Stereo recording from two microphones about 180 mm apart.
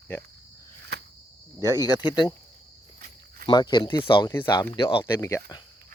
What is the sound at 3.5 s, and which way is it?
Speech, 25° left (ahead or behind).